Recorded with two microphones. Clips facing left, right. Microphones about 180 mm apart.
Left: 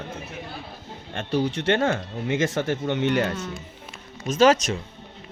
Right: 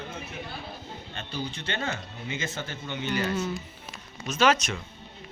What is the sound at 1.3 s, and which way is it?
Speech, 80° left.